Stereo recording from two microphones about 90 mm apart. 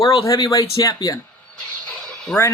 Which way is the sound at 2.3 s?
5° left (ahead or behind).